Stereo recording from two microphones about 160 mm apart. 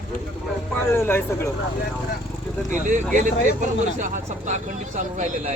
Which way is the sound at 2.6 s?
50° right (ahead or behind).